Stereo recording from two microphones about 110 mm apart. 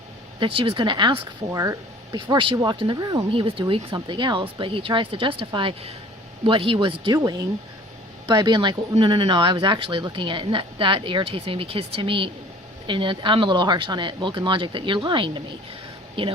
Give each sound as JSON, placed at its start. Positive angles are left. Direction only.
{"t": 0.3, "sound": "speech", "side_deg": -55}
{"t": 1.5, "sound": "speech", "side_deg": -30}
{"t": 2.1, "sound": "speech", "side_deg": -45}
{"t": 8.3, "sound": "speech", "side_deg": -40}